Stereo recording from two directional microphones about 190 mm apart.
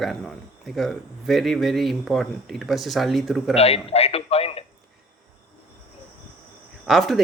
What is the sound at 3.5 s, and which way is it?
A man's voice, 35° left (ahead or behind).